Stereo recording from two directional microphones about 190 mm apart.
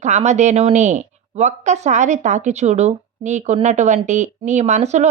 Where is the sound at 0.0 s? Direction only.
40° right (ahead or behind).